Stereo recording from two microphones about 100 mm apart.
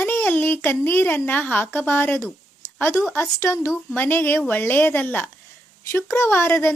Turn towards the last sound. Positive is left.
turn(degrees=25)  # may be behind; listen again after turning